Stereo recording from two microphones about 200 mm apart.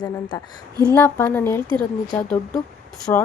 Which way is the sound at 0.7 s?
20° right (ahead or behind).